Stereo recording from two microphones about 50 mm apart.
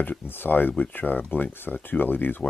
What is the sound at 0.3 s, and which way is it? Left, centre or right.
Speech, left.